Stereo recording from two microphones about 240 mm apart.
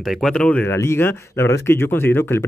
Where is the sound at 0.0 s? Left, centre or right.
Centre.